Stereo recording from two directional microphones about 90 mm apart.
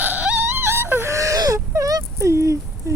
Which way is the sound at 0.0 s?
20° right (ahead or behind).